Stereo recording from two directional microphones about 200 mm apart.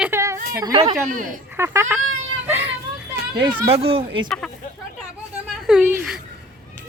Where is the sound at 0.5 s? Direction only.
20° right (ahead or behind).